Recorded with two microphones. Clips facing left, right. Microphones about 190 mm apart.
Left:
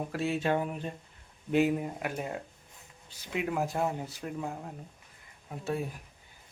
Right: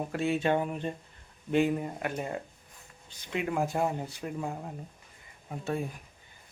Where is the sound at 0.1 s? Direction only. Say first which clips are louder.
Right 2 dB; centre (ahead or behind).